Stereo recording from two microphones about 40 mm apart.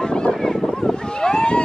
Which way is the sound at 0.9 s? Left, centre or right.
Left.